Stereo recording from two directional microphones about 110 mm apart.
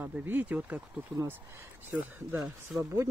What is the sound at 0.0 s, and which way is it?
Speech, 20° right (ahead or behind).